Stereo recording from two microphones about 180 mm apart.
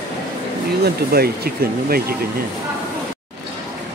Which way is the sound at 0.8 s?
60° right (ahead or behind).